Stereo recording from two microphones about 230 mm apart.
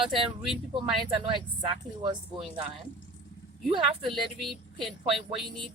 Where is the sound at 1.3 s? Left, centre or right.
Right.